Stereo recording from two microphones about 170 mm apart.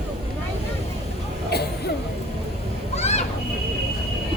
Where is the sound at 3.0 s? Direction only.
40° left (ahead or behind).